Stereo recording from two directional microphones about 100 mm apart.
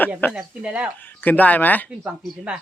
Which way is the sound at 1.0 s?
20° left (ahead or behind).